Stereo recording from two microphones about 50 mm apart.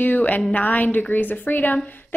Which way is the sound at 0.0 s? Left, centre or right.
Left.